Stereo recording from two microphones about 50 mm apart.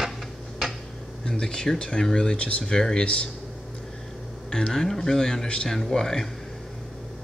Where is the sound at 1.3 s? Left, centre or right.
Centre.